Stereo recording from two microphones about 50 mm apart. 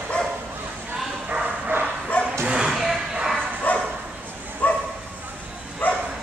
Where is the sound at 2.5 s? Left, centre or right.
Centre.